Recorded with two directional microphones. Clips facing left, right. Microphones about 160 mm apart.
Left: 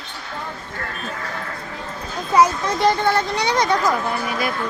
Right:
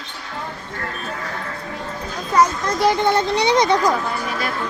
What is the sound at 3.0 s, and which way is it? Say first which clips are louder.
Speech: right 3 dB; 20° right (ahead or behind).